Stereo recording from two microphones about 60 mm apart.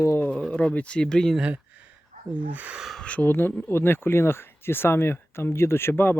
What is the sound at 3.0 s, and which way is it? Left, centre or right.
Speech, left.